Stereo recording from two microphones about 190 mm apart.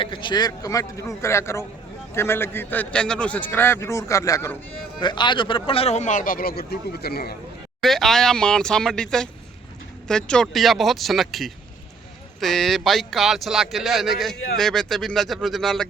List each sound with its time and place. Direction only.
0.0 s a man's voice: 25° left (ahead or behind); by 7.3 s 55° left (ahead or behind)
7.8 s speech: centre (ahead or behind)